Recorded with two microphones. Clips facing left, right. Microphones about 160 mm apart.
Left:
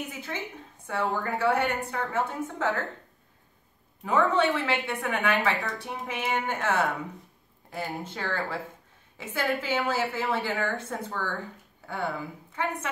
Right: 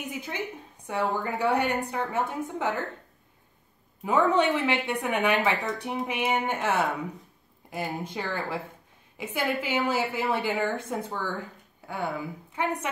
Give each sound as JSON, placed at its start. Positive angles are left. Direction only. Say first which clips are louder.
{"t": 0.1, "sound": "a woman's voice", "louder": "right 2 dB", "side_deg": -15}
{"t": 4.0, "sound": "a woman's voice", "louder": "right 1 dB", "side_deg": -15}